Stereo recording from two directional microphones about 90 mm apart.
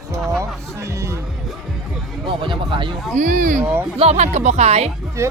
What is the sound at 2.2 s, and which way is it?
Speech, 65° right (ahead or behind).